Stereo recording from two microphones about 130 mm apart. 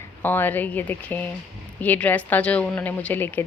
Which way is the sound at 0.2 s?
15° left (ahead or behind).